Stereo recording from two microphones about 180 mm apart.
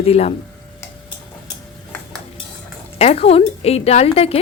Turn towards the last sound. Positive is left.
turn(degrees=35)  # may be behind; listen again after turning